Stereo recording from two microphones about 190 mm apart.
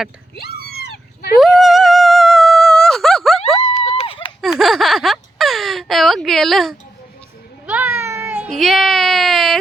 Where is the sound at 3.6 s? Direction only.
35° left (ahead or behind).